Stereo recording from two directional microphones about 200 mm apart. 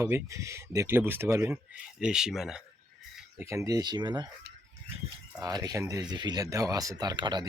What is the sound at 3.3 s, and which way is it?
Speech, 15° right (ahead or behind).